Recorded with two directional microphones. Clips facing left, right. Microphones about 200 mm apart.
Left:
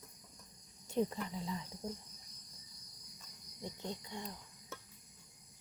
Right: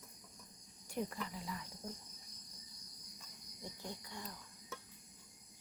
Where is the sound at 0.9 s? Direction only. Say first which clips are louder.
Left 6 dB; 25° left (ahead or behind).